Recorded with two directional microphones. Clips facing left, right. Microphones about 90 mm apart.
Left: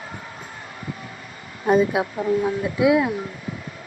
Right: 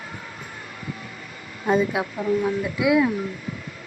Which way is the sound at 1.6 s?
20° left (ahead or behind).